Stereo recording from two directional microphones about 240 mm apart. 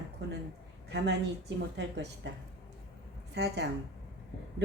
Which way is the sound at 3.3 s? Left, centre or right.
Right.